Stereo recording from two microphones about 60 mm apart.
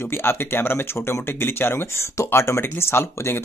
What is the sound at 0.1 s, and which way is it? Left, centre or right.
Speech, left.